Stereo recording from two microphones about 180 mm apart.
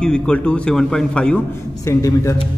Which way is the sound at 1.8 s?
15° left (ahead or behind).